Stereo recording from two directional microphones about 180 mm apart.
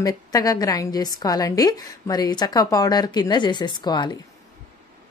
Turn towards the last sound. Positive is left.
turn(degrees=25)  # may be behind; listen again after turning